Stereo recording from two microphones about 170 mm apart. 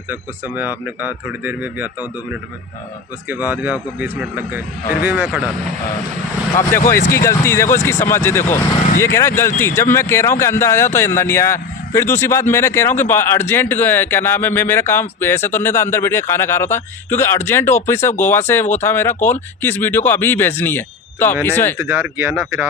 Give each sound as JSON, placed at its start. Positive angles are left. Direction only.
{"t": 0.1, "sound": "speech", "side_deg": -10}
{"t": 3.2, "sound": "speech", "side_deg": -10}
{"t": 6.6, "sound": "speech", "side_deg": 15}
{"t": 21.8, "sound": "speech", "side_deg": -10}